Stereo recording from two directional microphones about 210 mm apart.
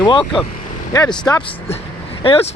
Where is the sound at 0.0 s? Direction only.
25° left (ahead or behind).